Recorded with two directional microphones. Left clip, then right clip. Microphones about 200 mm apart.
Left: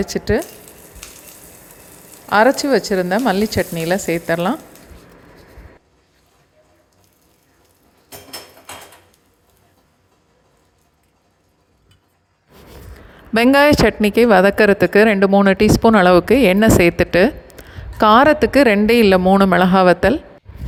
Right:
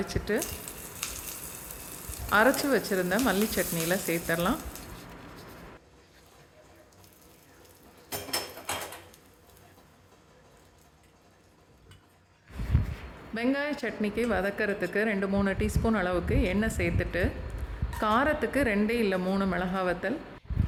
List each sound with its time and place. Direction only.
0.0 s speech: 35° left (ahead or behind)
2.3 s speech: 30° left (ahead or behind)
13.3 s speech: 50° left (ahead or behind)